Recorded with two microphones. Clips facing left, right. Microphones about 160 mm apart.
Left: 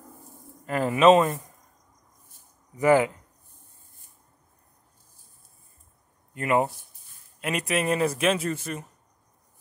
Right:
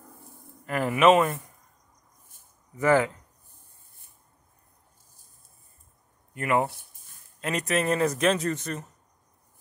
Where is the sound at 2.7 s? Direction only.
15° left (ahead or behind).